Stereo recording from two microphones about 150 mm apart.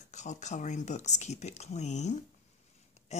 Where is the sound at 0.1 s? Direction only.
55° left (ahead or behind).